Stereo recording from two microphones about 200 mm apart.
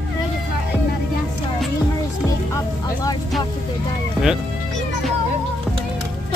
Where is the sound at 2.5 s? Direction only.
20° left (ahead or behind).